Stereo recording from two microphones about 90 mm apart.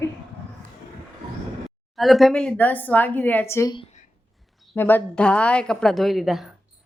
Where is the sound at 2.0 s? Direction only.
Centre (ahead or behind).